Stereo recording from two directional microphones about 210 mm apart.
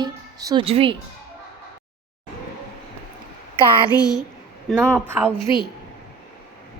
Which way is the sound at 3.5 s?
25° right (ahead or behind).